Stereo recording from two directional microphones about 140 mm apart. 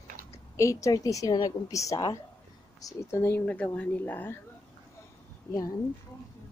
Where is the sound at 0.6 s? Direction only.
20° left (ahead or behind).